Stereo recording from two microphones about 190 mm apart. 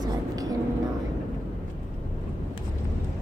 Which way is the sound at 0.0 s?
20° right (ahead or behind).